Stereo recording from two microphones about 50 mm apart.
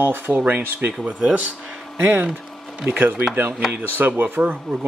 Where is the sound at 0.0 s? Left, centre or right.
Right.